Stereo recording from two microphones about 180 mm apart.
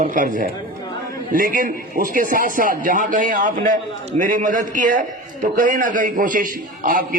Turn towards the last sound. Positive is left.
turn(degrees=-50)  # may be behind; listen again after turning